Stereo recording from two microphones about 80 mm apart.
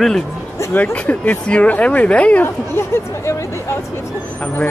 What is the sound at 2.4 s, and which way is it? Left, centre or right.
Speech, left.